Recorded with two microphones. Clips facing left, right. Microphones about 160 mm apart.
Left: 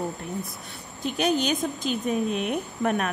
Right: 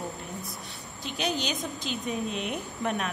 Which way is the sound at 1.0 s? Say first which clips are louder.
Left 7 dB; 50° left (ahead or behind).